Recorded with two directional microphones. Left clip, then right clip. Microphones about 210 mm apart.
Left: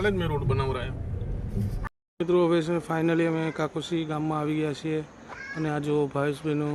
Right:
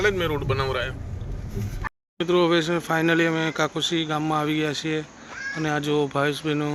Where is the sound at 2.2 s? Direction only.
Centre (ahead or behind).